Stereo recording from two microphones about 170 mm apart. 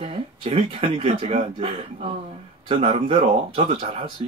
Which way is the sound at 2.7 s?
35° right (ahead or behind).